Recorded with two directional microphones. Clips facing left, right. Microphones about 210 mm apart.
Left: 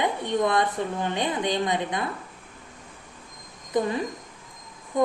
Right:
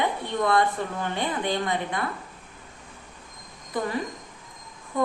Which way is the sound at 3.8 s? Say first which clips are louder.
Left 3 dB; 20° left (ahead or behind).